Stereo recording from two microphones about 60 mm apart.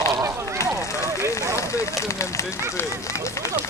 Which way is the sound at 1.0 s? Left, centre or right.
Left.